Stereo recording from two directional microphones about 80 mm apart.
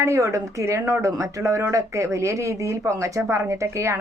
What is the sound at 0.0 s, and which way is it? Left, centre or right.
A woman's voice, right.